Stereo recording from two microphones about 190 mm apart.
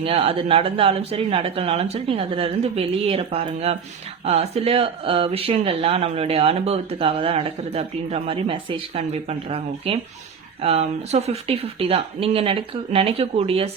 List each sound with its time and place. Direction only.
0.0 s speech: 30° right (ahead or behind)